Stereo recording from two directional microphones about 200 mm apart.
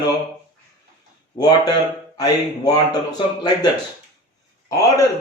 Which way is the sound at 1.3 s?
35° left (ahead or behind).